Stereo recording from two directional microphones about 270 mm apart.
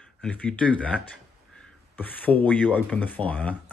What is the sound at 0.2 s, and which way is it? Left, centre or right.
Speech, centre.